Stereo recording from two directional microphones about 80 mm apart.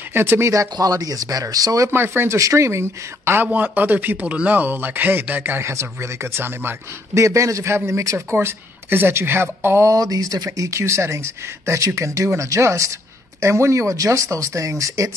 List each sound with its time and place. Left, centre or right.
0.1 s speech: right
1.9 s speech: right
2.3 s a man's voice: right
3.4 s speech: right
7.2 s a man's voice: right
9.9 s speech: right
10.7 s a man's voice: right